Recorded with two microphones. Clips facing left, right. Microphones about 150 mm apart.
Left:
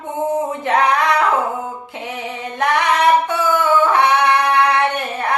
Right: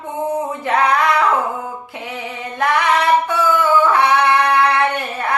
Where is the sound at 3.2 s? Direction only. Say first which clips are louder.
Right 1 dB; 20° left (ahead or behind).